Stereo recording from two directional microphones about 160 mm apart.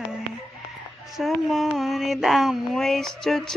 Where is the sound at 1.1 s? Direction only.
Centre (ahead or behind).